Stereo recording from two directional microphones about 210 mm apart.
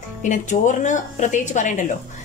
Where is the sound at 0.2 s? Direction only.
35° left (ahead or behind).